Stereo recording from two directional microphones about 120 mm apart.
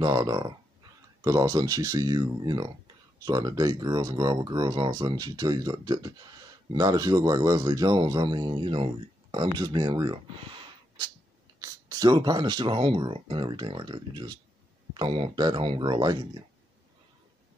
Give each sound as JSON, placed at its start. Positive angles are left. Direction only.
{"t": 0.0, "sound": "speech", "side_deg": -35}
{"t": 10.3, "sound": "a sound", "side_deg": -45}
{"t": 11.6, "sound": "speech", "side_deg": -30}